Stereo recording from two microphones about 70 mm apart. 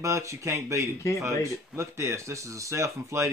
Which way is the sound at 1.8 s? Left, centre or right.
Right.